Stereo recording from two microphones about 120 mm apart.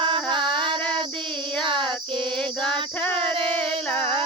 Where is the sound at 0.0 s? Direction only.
40° right (ahead or behind).